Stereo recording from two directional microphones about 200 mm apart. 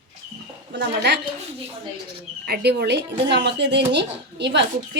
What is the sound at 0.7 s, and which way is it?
Speech, 60° right (ahead or behind).